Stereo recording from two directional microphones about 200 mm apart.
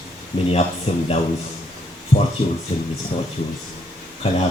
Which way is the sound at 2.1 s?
25° left (ahead or behind).